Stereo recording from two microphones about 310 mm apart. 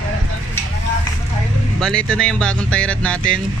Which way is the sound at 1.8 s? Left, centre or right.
Centre.